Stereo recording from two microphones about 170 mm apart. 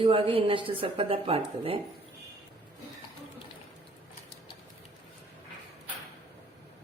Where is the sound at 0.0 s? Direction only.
30° right (ahead or behind).